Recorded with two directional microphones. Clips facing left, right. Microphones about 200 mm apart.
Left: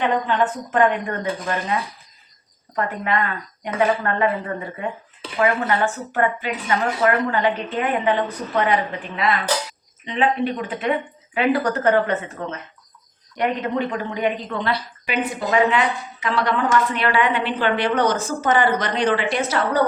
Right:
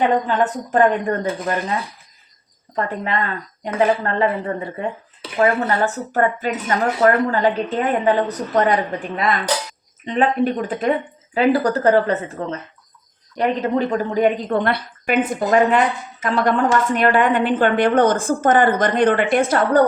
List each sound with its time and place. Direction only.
0.0 s speech: 40° right (ahead or behind)
2.7 s a woman's voice: 30° right (ahead or behind); by 19.8 s 50° right (ahead or behind)